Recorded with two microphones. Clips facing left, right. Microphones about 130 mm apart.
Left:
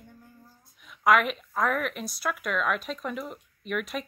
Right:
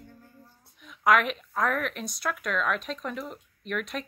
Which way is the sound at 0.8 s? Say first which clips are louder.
Left 1 dB; centre (ahead or behind).